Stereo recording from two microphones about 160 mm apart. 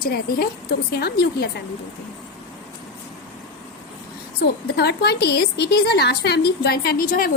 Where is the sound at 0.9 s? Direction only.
90° left.